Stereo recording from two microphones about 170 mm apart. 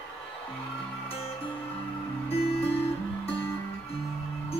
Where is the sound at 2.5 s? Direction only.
35° left (ahead or behind).